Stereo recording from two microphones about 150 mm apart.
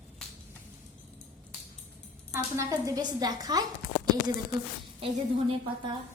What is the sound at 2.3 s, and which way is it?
A woman's voice, 20° right (ahead or behind).